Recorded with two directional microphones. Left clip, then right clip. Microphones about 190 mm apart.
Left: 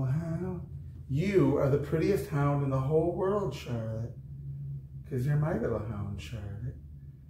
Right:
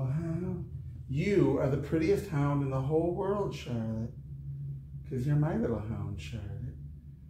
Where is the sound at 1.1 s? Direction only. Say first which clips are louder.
Left 1 dB; 10° right (ahead or behind).